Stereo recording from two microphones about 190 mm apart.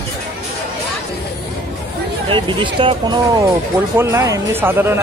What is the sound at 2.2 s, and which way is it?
Speech, 25° right (ahead or behind).